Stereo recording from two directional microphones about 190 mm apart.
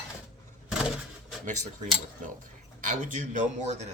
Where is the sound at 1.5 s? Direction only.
40° right (ahead or behind).